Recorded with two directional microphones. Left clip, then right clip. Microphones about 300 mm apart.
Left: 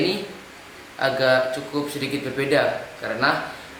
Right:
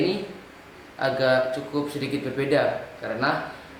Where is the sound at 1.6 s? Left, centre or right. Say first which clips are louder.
Left 1 dB; centre.